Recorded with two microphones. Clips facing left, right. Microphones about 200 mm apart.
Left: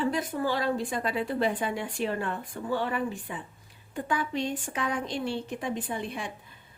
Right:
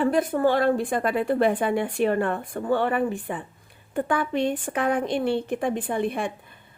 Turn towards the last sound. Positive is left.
turn(degrees=-55)  # may be behind; listen again after turning